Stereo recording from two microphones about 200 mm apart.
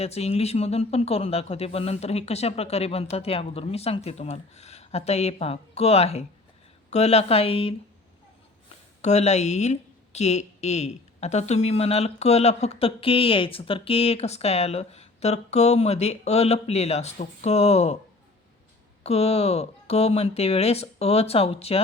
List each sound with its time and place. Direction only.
0.0 s speech: 30° left (ahead or behind)
19.0 s speech: 30° left (ahead or behind)